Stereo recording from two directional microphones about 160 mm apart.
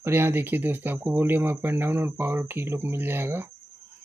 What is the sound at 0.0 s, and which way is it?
Speech, 15° right (ahead or behind).